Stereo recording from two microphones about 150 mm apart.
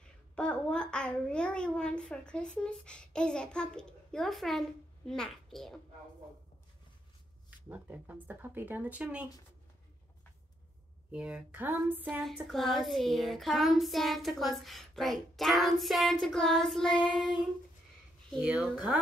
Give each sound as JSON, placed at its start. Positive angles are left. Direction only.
{"t": 0.4, "sound": "a child's voice", "side_deg": 5}
{"t": 7.7, "sound": "speech", "side_deg": -10}
{"t": 11.1, "sound": "speech", "side_deg": -10}
{"t": 12.2, "sound": "a child's voice", "side_deg": 0}